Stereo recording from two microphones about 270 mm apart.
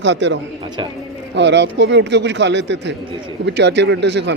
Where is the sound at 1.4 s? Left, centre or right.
Right.